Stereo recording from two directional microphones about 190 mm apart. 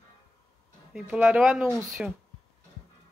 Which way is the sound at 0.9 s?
5° right (ahead or behind).